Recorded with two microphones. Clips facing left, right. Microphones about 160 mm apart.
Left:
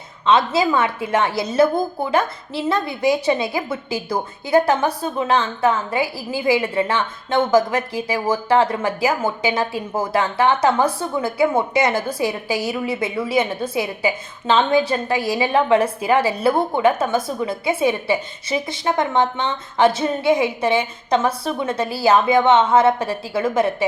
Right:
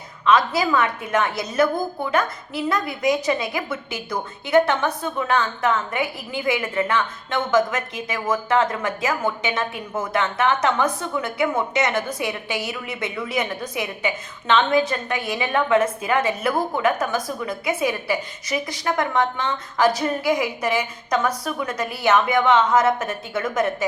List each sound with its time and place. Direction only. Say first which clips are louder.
0.3 s a woman's voice: left 2 dB; 25° left (ahead or behind)